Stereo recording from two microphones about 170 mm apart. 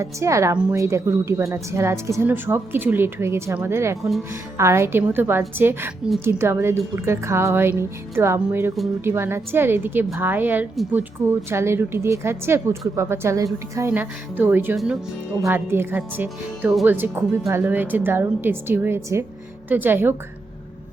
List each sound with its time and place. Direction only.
0.0 s a woman's voice: 15° right (ahead or behind)